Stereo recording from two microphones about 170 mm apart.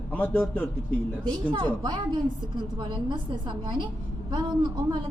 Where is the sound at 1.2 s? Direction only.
25° right (ahead or behind).